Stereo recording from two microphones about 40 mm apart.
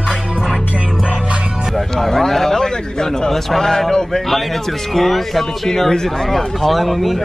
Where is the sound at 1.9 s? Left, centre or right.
Centre.